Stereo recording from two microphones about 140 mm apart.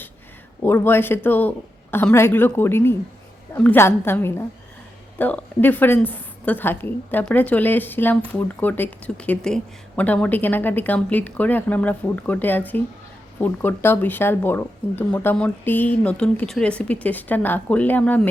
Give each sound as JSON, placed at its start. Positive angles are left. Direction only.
{"t": 0.6, "sound": "speech", "side_deg": 15}